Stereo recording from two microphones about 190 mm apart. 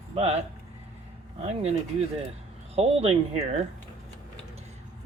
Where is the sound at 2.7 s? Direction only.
35° right (ahead or behind).